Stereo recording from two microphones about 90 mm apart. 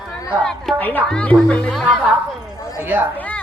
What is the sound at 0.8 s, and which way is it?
Speech, 20° left (ahead or behind).